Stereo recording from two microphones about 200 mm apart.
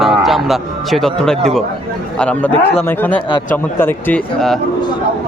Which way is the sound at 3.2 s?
25° left (ahead or behind).